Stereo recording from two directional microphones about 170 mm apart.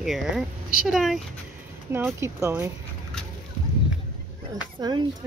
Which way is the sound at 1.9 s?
15° right (ahead or behind).